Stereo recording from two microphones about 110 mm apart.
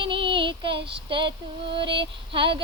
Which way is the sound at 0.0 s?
50° right (ahead or behind).